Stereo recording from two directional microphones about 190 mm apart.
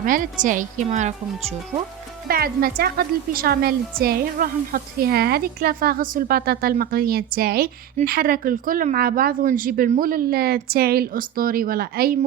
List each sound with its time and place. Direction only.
0.0 s a woman's voice: 45° right (ahead or behind)
2.2 s a woman's voice: 50° right (ahead or behind)